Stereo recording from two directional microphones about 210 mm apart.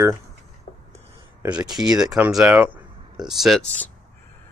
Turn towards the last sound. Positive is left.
turn(degrees=0)  # may be behind; listen again after turning